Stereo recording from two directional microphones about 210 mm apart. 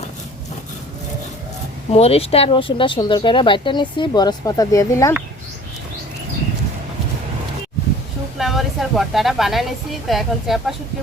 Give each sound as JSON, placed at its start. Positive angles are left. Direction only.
{"t": 1.9, "sound": "speech", "side_deg": 30}
{"t": 8.4, "sound": "a woman's voice", "side_deg": 0}